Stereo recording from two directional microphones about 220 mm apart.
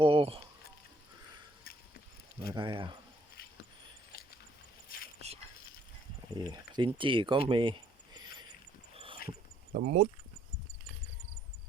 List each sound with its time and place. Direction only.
0.0 s a sound: 25° right (ahead or behind)
2.5 s speech: 20° right (ahead or behind)
4.1 s a sound: 45° left (ahead or behind)
4.9 s mechanisms: 40° left (ahead or behind)
6.3 s speech: 20° right (ahead or behind)
9.7 s speech: 35° right (ahead or behind)